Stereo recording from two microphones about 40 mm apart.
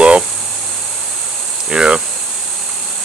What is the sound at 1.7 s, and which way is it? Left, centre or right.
Speech, right.